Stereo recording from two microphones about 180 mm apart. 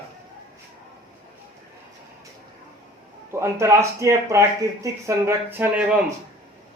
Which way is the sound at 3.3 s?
15° right (ahead or behind).